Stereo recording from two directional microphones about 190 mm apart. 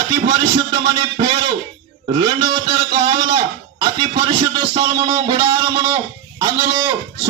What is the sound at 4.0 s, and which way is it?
A man's voice, 25° right (ahead or behind).